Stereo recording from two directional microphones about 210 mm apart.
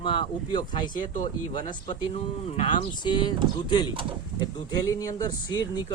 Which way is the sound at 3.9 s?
25° right (ahead or behind).